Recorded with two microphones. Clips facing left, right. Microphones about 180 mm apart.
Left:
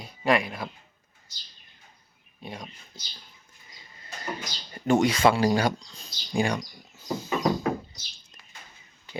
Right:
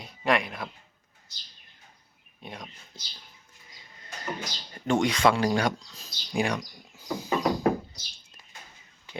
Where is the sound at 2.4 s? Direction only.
Centre (ahead or behind).